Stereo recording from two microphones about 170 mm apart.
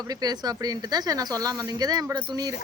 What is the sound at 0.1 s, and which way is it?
Speech, 25° right (ahead or behind).